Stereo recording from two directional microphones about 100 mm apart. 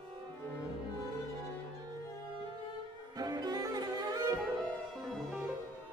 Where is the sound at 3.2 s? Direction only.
40° right (ahead or behind).